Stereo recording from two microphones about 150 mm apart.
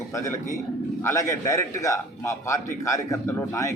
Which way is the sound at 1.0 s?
20° left (ahead or behind).